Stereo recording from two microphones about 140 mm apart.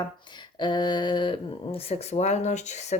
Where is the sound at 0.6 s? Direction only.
30° left (ahead or behind).